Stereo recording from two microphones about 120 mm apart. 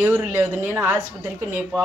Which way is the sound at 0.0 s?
15° right (ahead or behind).